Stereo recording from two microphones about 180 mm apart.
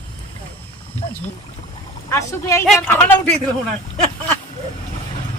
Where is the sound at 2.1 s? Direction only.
15° left (ahead or behind).